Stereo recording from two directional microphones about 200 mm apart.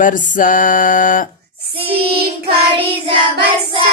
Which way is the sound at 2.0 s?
50° right (ahead or behind).